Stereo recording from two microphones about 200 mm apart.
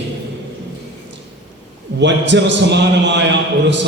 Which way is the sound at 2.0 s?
60° right (ahead or behind).